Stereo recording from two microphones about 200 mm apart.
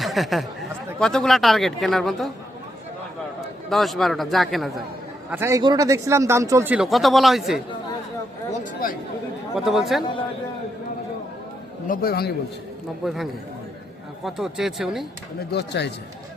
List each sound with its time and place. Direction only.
0.0 s speech: centre (ahead or behind)
3.7 s speech: centre (ahead or behind)
5.3 s speech: 15° right (ahead or behind)
8.5 s a man's voice: 45° left (ahead or behind)
9.6 s speech: centre (ahead or behind)
11.9 s a man's voice: 50° left (ahead or behind)
14.3 s speech: centre (ahead or behind)
15.4 s speech: 55° left (ahead or behind)